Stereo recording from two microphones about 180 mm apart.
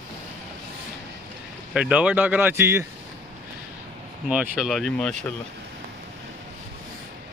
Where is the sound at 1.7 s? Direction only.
5° right (ahead or behind).